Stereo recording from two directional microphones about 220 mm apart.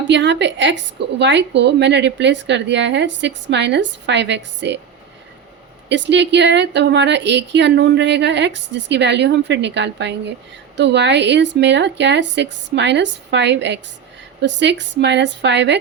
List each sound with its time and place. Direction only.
0.1 s a woman's voice: 55° right (ahead or behind)
5.9 s a woman's voice: 55° right (ahead or behind)